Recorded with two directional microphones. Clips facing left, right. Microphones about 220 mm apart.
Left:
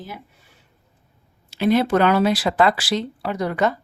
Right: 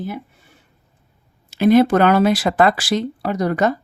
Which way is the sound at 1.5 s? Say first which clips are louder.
Right 5 dB; 45° right (ahead or behind).